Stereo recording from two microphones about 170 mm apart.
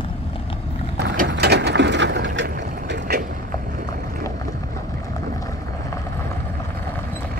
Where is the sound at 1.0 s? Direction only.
75° right (ahead or behind).